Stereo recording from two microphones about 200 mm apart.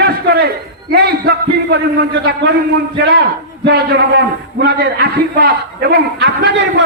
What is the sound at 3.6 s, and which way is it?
A man's voice, 55° right (ahead or behind).